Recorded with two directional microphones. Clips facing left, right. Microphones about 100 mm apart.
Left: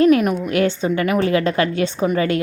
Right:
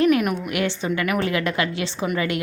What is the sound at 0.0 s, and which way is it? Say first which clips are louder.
A woman's voice: left 4 dB; 30° left (ahead or behind).